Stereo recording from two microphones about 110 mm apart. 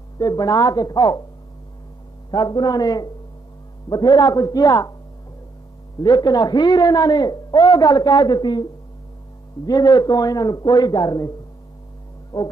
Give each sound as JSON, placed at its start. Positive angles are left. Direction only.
{"t": 0.2, "sound": "a man's voice", "side_deg": 35}
{"t": 2.3, "sound": "a man's voice", "side_deg": 45}
{"t": 5.9, "sound": "a man's voice", "side_deg": 40}
{"t": 9.7, "sound": "a man's voice", "side_deg": 35}